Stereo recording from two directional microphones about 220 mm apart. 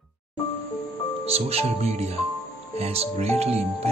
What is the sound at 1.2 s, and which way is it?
Speech, 25° right (ahead or behind).